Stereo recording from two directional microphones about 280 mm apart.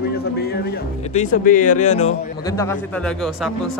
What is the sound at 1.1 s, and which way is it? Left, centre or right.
Speech, left.